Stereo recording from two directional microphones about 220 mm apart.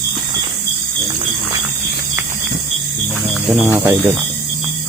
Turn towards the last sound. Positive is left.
turn(degrees=-10)  # may be behind; listen again after turning